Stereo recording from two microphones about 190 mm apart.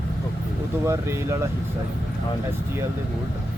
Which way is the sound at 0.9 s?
15° right (ahead or behind).